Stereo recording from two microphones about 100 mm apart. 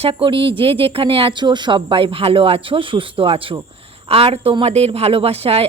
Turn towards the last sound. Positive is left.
turn(degrees=-80)